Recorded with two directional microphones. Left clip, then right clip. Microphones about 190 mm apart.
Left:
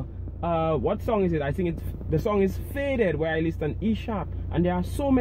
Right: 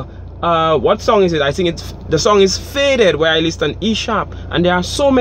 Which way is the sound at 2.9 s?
50° right (ahead or behind).